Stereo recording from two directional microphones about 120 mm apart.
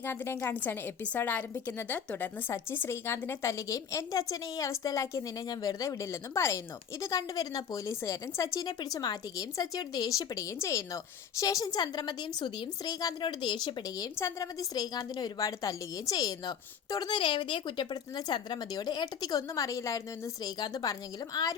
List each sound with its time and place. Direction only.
0.0 s a woman's voice: 20° left (ahead or behind); by 14.1 s 35° left (ahead or behind)
14.2 s a woman's voice: 25° left (ahead or behind)